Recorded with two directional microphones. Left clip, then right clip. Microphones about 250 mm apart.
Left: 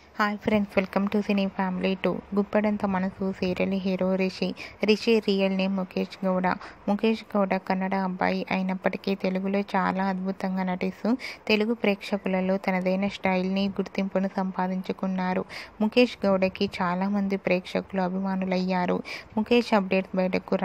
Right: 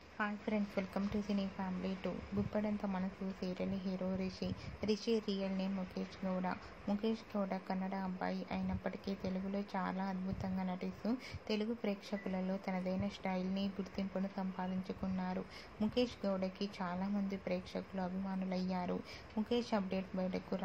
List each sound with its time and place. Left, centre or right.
0.2 s a woman's voice: left